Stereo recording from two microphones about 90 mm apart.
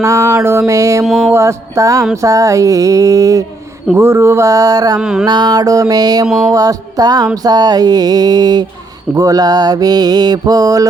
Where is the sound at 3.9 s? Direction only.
30° right (ahead or behind).